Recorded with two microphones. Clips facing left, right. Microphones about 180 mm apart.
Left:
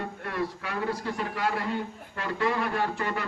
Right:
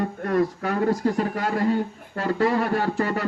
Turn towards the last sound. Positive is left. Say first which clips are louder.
# right 6 dB
turn(degrees=-40)  # may be behind; listen again after turning